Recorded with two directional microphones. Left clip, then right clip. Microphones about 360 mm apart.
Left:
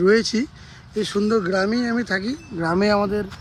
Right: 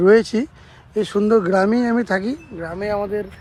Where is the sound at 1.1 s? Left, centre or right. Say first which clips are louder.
Right 5 dB; right.